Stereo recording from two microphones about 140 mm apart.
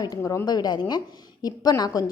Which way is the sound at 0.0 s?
25° left (ahead or behind).